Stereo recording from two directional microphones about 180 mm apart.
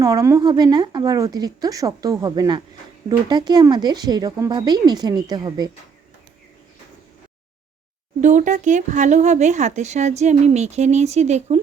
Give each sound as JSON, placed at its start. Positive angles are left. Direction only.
{"t": 0.0, "sound": "speech", "side_deg": -20}
{"t": 8.2, "sound": "speech", "side_deg": -45}